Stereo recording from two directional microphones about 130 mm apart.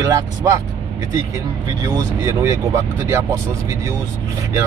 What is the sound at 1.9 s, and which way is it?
Speech, 25° right (ahead or behind).